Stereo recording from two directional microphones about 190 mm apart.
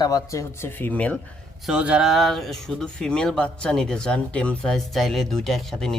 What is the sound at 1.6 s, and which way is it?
Speech, 5° right (ahead or behind).